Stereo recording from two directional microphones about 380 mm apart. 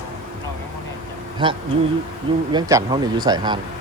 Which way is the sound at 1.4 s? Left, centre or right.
Centre.